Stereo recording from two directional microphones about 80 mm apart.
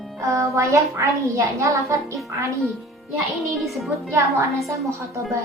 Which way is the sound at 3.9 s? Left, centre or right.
Right.